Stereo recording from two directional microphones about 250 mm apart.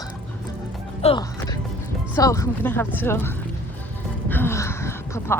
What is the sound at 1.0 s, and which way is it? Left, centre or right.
Speech, centre.